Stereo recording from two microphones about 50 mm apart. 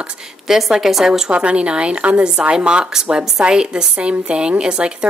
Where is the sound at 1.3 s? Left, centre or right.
Right.